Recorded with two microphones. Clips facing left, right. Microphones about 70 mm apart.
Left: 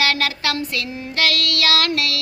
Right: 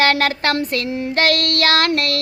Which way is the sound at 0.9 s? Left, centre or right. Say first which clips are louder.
Right 7 dB; right.